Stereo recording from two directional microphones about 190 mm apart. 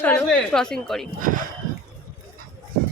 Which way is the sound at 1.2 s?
45° right (ahead or behind).